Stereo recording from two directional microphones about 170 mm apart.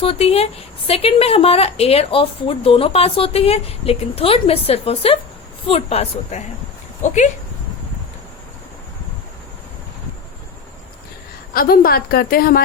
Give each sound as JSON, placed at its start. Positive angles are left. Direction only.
{"t": 0.0, "sound": "a woman's voice", "side_deg": 35}
{"t": 11.5, "sound": "a woman's voice", "side_deg": 60}